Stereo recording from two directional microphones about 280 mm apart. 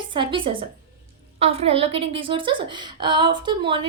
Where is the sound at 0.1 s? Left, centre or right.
Centre.